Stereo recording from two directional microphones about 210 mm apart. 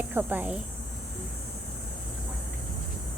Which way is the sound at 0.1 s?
10° right (ahead or behind).